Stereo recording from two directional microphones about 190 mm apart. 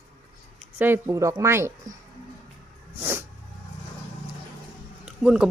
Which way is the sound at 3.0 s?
15° right (ahead or behind).